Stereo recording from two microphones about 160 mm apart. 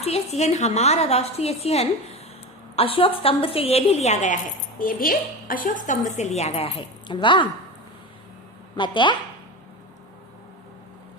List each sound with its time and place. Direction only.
0.0 s a woman's voice: 40° left (ahead or behind)
4.8 s a woman's voice: 60° left (ahead or behind); by 7.4 s 30° left (ahead or behind)
8.7 s a woman's voice: 30° left (ahead or behind)